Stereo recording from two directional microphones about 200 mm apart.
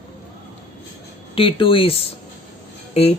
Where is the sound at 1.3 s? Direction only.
25° left (ahead or behind).